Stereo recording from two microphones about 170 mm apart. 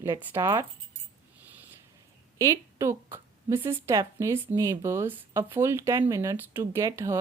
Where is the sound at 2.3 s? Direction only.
20° right (ahead or behind).